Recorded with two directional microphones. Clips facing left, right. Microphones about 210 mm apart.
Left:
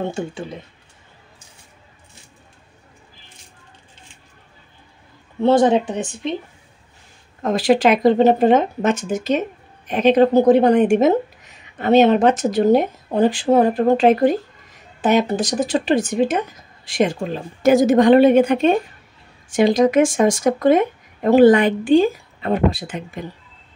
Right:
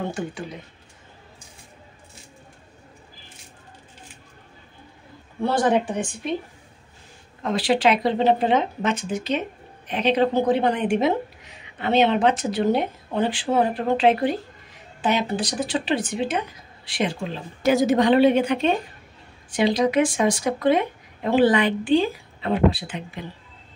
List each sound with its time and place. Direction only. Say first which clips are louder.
0.1 s speech: left 3 dB; 25° left (ahead or behind)
5.4 s speech: left 6 dB; 25° left (ahead or behind)
7.4 s speech: left 5 dB; 45° left (ahead or behind)